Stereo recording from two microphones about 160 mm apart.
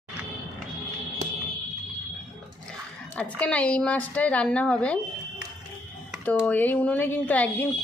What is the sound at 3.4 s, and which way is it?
Speech, 10° left (ahead or behind).